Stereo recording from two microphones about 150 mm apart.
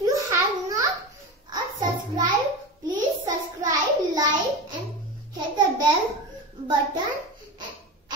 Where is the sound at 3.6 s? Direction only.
25° right (ahead or behind).